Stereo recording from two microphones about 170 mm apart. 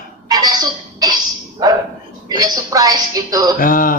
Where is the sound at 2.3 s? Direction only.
25° right (ahead or behind).